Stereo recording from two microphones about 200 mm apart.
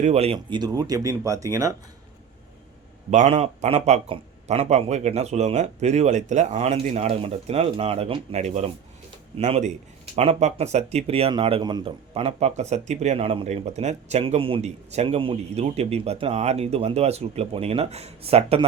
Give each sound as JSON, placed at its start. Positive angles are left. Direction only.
{"t": 0.0, "sound": "speech", "side_deg": -30}
{"t": 0.3, "sound": "speech", "side_deg": -20}
{"t": 3.1, "sound": "speech", "side_deg": -35}